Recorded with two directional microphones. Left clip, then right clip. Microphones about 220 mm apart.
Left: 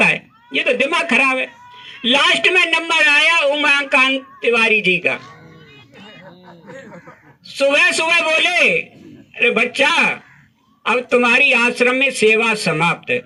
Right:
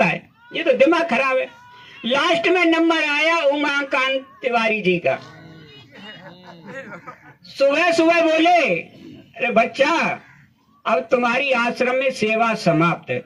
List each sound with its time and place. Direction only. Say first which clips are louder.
0.0 s a sound: left 4 dB; 30° left (ahead or behind)
2.0 s a man's voice: left 4 dB; 30° left (ahead or behind)
7.4 s a man's voice: left 3 dB; 35° left (ahead or behind)